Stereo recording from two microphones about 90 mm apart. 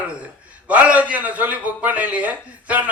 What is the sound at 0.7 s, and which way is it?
Speech, 15° right (ahead or behind).